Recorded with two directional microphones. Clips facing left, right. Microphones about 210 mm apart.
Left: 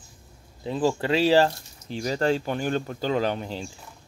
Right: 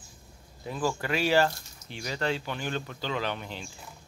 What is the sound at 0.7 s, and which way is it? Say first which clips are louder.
Speech: left 6 dB; 25° left (ahead or behind).